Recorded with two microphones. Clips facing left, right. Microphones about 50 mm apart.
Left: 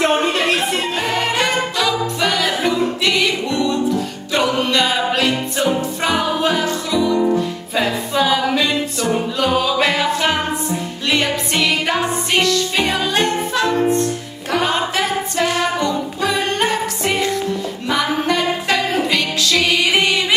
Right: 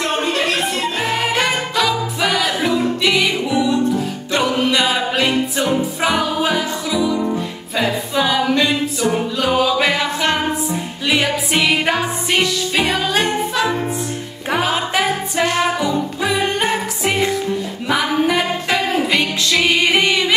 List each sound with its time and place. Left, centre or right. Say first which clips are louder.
0.0 s music: left 3 dB; left
1.0 s music: right 1 dB; centre